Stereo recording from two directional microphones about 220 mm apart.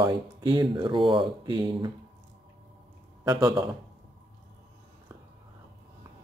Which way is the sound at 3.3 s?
15° right (ahead or behind).